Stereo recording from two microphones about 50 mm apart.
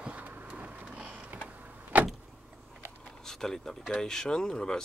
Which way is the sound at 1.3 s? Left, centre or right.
Right.